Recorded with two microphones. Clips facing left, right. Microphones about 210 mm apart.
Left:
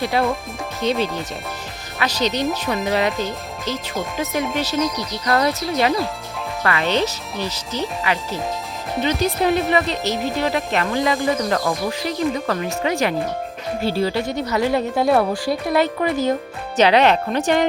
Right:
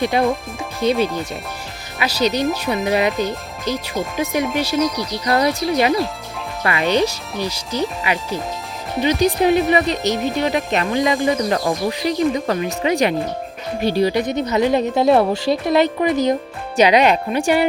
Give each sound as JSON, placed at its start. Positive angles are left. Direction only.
{"t": 0.0, "sound": "a woman's voice", "side_deg": -15}